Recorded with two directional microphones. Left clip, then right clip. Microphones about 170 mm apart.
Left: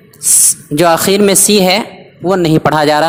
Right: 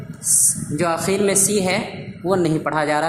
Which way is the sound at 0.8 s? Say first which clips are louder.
Left 11 dB; 50° left (ahead or behind).